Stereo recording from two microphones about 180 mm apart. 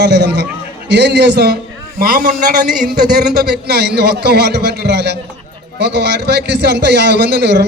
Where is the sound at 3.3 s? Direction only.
65° right (ahead or behind).